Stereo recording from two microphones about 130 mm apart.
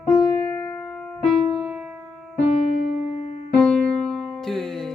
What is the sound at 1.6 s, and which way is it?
Music, 10° right (ahead or behind).